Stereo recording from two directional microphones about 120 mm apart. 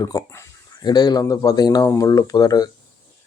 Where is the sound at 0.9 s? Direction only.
35° left (ahead or behind).